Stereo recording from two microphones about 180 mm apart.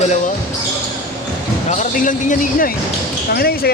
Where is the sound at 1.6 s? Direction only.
45° left (ahead or behind).